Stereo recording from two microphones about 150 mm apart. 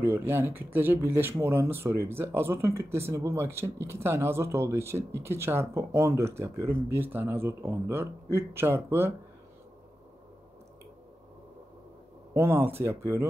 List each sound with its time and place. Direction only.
0.0 s speech: 15° right (ahead or behind)
12.4 s speech: 15° right (ahead or behind)